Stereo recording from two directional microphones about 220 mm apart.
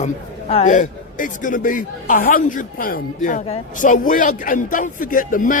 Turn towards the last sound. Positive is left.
turn(degrees=35)  # may be behind; listen again after turning